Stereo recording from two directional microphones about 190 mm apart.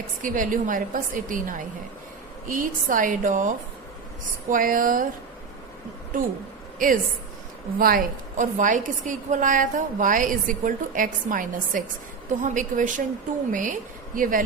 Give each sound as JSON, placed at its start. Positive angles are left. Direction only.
{"t": 0.2, "sound": "a woman's voice", "side_deg": -45}
{"t": 6.7, "sound": "a woman's voice", "side_deg": -45}